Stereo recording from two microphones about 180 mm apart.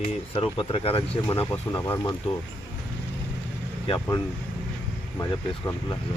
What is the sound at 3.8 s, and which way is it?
Speech, 30° left (ahead or behind).